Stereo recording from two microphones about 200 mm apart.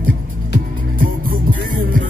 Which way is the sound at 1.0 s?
45° right (ahead or behind).